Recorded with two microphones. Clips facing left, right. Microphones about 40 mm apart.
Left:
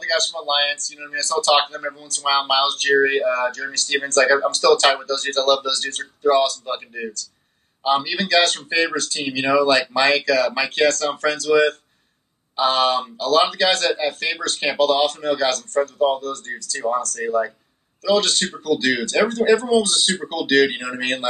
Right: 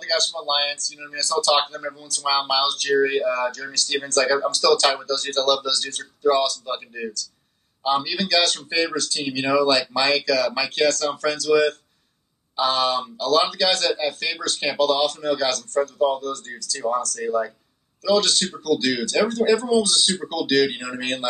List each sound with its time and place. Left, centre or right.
0.0 s speech: left